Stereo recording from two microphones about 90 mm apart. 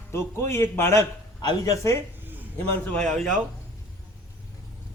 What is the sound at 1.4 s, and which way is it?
Speech, 50° left (ahead or behind).